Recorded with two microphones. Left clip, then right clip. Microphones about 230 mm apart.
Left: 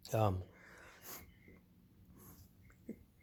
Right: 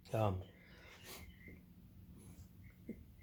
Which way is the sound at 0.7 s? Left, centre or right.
Left.